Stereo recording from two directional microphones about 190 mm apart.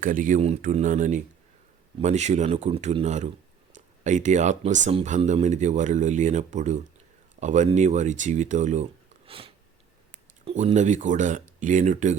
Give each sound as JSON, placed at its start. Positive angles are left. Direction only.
{"t": 0.0, "sound": "speech", "side_deg": -45}